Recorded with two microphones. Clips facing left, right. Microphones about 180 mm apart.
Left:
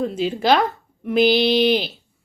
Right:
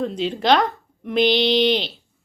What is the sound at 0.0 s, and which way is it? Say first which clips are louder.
A woman's voice: left 1 dB; 5° left (ahead or behind).